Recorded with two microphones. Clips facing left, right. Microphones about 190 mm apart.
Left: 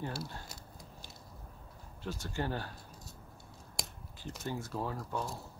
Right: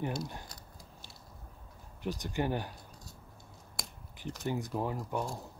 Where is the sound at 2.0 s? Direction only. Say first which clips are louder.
Right 4 dB; 15° right (ahead or behind).